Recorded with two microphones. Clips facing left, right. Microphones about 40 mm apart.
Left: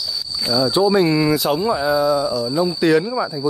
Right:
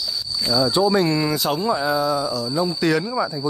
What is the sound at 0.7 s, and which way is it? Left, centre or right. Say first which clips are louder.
Speech: left 5 dB; centre.